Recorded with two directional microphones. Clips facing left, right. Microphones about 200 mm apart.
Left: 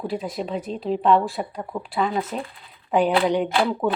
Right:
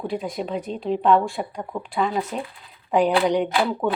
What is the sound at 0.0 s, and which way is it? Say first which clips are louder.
Speech: even; centre (ahead or behind).